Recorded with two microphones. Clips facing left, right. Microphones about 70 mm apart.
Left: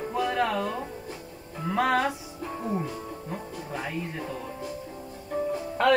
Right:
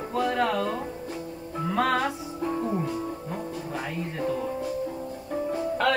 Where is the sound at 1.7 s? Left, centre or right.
Centre.